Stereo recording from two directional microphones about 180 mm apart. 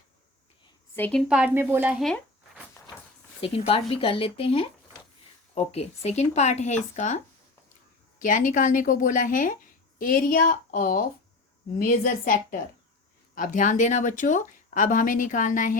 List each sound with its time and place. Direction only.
0.9 s a woman's voice: 10° left (ahead or behind)
1.3 s speech: 10° right (ahead or behind)
3.4 s speech: 30° left (ahead or behind)
8.2 s speech: 50° left (ahead or behind)